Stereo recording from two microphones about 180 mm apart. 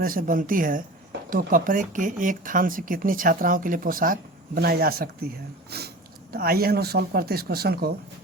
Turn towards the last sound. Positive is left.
turn(degrees=-60)  # may be behind; listen again after turning